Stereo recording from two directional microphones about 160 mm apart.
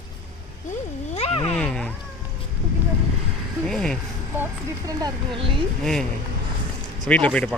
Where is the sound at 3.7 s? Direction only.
5° left (ahead or behind).